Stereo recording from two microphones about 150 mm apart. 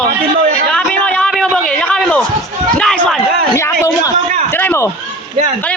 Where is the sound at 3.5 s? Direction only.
20° left (ahead or behind).